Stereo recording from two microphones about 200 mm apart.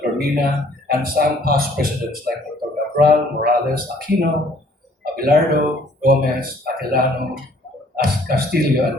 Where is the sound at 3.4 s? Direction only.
50° right (ahead or behind).